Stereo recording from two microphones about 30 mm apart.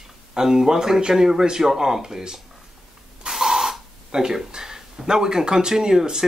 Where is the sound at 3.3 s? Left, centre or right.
Centre.